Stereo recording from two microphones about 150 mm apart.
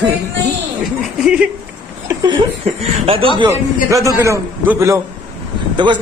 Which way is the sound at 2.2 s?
30° right (ahead or behind).